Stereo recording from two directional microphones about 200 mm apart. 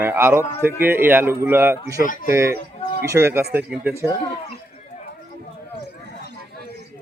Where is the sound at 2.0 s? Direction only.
45° left (ahead or behind).